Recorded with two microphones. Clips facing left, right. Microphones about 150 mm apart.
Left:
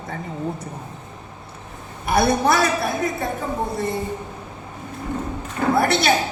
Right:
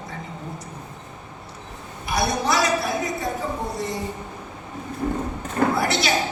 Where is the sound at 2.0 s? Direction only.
55° left (ahead or behind).